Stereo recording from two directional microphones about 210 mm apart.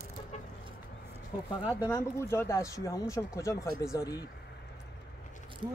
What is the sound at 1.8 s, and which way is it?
Speech, 15° left (ahead or behind).